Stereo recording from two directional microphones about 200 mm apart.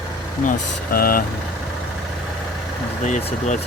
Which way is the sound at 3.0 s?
35° left (ahead or behind).